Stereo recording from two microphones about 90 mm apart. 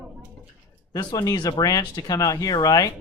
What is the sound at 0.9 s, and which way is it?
Speech, 45° left (ahead or behind).